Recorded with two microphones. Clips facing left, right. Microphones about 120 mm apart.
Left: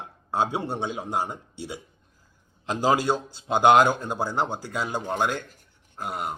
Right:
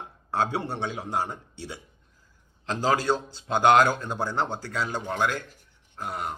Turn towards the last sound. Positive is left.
turn(degrees=15)  # may be behind; listen again after turning